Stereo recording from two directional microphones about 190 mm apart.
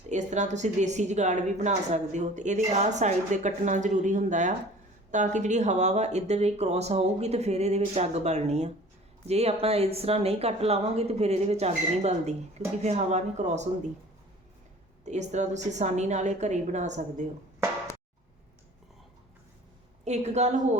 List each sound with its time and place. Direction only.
0.1 s a woman's voice: 40° right (ahead or behind)
15.0 s a woman's voice: 35° right (ahead or behind)
20.1 s a woman's voice: 35° right (ahead or behind)